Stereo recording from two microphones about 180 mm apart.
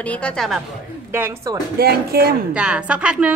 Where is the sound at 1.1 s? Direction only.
15° right (ahead or behind).